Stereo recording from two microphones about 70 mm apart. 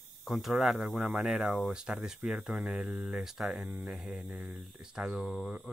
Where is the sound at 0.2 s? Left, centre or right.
Centre.